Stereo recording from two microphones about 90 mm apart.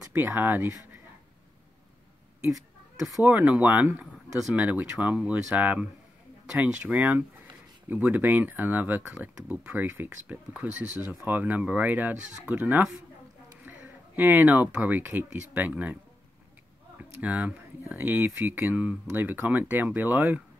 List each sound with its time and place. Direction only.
0.1 s speech: 20° right (ahead or behind)
3.2 s speech: 20° right (ahead or behind)
17.2 s speech: 15° right (ahead or behind)